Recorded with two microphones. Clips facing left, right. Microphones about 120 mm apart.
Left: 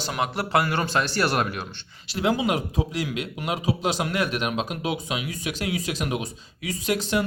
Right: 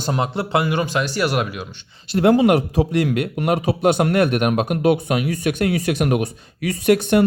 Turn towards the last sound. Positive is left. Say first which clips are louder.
# right 9 dB
turn(degrees=-60)  # may be behind; listen again after turning